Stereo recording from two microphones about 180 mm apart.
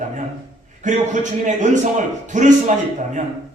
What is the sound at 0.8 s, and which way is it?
A man's voice, 45° right (ahead or behind).